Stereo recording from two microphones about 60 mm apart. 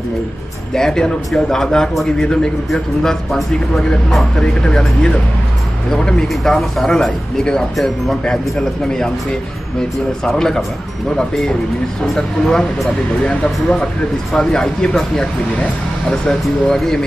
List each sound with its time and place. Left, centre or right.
0.7 s speech: centre
4.4 s speech: centre
10.2 s speech: centre